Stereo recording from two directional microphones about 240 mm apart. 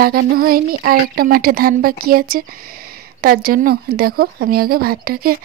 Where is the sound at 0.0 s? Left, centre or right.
Right.